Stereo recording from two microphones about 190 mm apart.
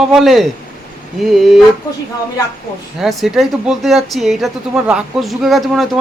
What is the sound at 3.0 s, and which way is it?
Speech, centre (ahead or behind).